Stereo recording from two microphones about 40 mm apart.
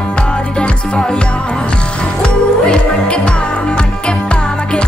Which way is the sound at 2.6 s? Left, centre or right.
Left.